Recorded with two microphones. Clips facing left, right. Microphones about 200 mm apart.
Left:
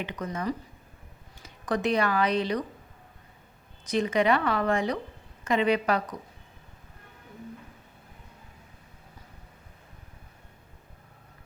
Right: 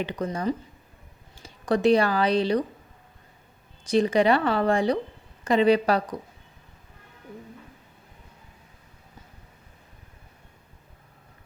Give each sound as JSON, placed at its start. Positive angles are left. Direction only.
{"t": 0.0, "sound": "speech", "side_deg": -30}
{"t": 3.8, "sound": "speech", "side_deg": -35}